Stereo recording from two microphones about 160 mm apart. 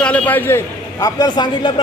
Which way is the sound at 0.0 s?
10° left (ahead or behind).